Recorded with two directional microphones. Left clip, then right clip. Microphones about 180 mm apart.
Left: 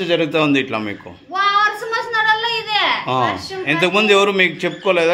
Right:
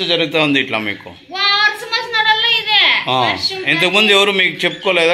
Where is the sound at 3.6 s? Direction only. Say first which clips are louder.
Right 2 dB; 5° left (ahead or behind).